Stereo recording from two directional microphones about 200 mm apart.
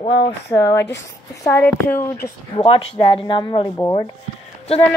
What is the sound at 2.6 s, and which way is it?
A woman's voice, 25° left (ahead or behind).